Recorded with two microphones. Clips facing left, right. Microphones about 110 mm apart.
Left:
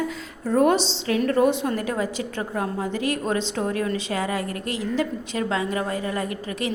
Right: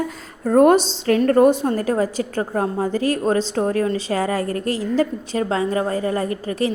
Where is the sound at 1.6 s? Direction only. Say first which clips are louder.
Right 5 dB; 35° right (ahead or behind).